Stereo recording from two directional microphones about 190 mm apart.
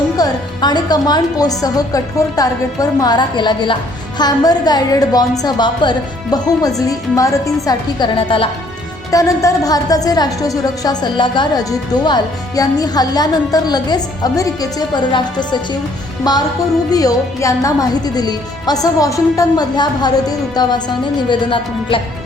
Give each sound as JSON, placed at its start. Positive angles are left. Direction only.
{"t": 0.2, "sound": "a woman's voice", "side_deg": 20}